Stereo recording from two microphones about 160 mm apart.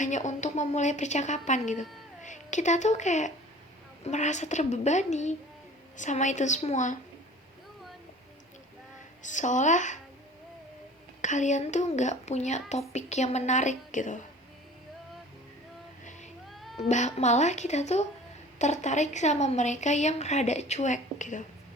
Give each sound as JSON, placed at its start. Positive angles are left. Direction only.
{"t": 0.0, "sound": "a woman's voice", "side_deg": 50}
{"t": 9.2, "sound": "a woman's voice", "side_deg": 50}
{"t": 11.2, "sound": "a woman's voice", "side_deg": 50}
{"t": 16.5, "sound": "cat", "side_deg": 0}
{"t": 16.7, "sound": "a woman's voice", "side_deg": 45}